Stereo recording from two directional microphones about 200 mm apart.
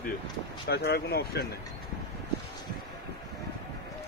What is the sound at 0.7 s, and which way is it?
Speech, 50° left (ahead or behind).